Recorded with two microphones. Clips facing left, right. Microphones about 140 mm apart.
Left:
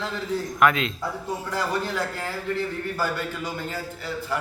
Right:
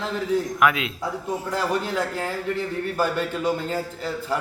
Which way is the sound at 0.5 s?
5° right (ahead or behind).